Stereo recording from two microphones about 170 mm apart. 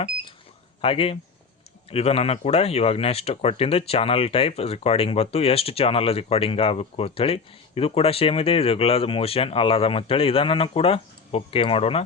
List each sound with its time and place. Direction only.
0.8 s speech: 35° left (ahead or behind)